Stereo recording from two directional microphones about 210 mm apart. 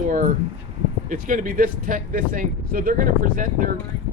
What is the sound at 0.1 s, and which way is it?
Speech, 40° right (ahead or behind).